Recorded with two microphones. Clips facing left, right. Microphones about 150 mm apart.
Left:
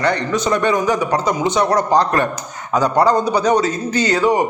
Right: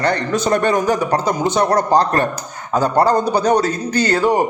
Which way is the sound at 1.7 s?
35° right (ahead or behind).